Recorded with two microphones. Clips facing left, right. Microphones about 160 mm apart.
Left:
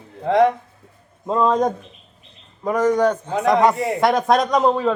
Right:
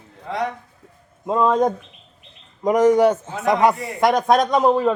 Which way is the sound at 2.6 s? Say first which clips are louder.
Right 3 dB; 10° right (ahead or behind).